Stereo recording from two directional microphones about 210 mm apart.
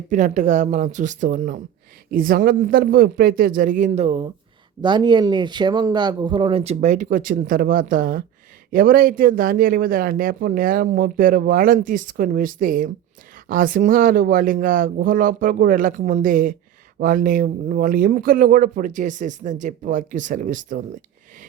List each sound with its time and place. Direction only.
0.1 s speech: 35° right (ahead or behind)